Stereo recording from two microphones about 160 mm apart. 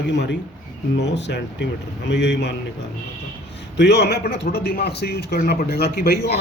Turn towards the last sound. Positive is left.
turn(degrees=80)